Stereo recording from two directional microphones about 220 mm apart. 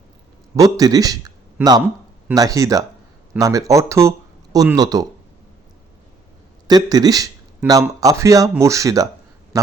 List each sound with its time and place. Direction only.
0.5 s speech: 15° right (ahead or behind)
6.7 s speech: 15° right (ahead or behind)